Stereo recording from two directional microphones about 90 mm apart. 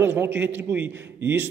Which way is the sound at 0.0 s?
20° right (ahead or behind).